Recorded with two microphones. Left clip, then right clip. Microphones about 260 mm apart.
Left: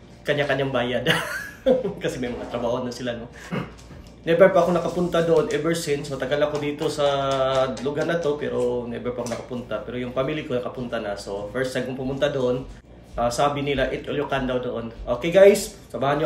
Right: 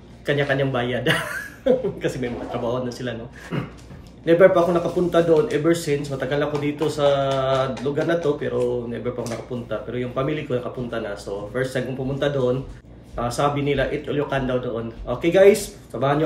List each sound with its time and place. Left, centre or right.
0.3 s speech: centre
4.3 s speech: centre